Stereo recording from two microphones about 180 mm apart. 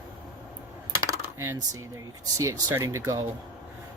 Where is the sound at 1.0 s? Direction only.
15° right (ahead or behind).